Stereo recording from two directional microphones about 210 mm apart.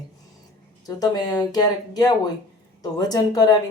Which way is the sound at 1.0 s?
20° left (ahead or behind).